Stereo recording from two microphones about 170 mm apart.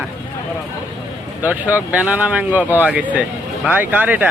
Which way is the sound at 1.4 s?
10° right (ahead or behind).